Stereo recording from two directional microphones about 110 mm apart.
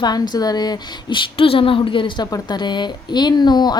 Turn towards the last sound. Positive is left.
turn(degrees=40)  # may be behind; listen again after turning